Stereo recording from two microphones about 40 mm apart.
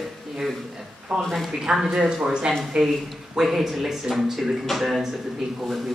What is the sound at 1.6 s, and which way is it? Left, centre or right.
Speech, centre.